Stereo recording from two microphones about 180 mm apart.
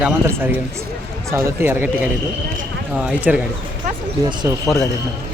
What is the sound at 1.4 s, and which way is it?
Speech, 10° right (ahead or behind).